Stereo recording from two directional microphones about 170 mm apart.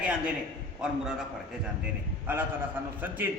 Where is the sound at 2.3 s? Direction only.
10° right (ahead or behind).